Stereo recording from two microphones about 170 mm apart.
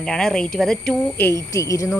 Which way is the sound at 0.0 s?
5° left (ahead or behind).